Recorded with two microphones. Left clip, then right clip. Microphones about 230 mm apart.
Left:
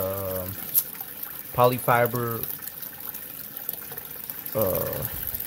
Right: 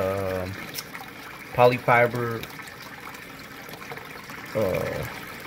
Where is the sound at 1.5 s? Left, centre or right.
Centre.